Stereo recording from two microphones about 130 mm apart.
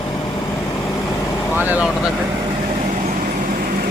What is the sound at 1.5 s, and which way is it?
Speech, 15° right (ahead or behind).